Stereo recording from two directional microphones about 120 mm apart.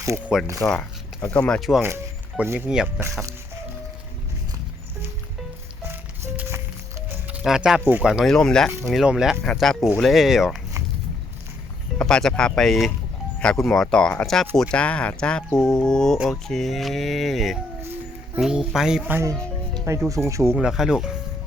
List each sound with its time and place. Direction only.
0.3 s speech: 5° right (ahead or behind)
0.7 s speech: 10° left (ahead or behind)
2.4 s speech: 15° right (ahead or behind)
5.9 s music: 15° right (ahead or behind)
7.4 s speech: 5° right (ahead or behind)
8.3 s speech: 5° left (ahead or behind)
11.9 s speech: 5° left (ahead or behind)
19.1 s speech: 25° right (ahead or behind)
20.6 s speech: 5° right (ahead or behind)